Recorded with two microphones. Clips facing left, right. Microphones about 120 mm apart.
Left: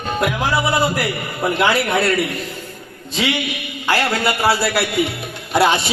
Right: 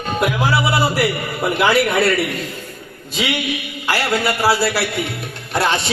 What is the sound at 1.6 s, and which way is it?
Speech, centre (ahead or behind).